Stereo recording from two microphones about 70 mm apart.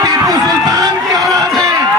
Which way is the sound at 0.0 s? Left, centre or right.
Right.